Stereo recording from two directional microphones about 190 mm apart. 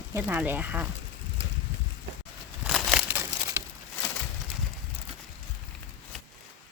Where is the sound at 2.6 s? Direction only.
Centre (ahead or behind).